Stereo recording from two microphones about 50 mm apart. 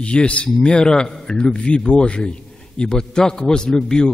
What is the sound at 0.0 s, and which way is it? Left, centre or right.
A man's voice, left.